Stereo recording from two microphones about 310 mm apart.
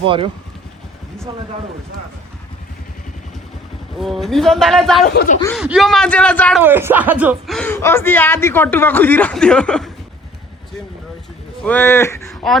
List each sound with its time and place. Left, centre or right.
0.0 s speech: centre
3.9 s speech: centre
5.0 s speech: left
5.5 s speech: centre
6.6 s speech: centre
11.6 s speech: centre